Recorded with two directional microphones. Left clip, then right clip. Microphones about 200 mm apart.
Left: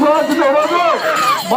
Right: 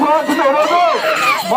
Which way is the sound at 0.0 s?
50° right (ahead or behind).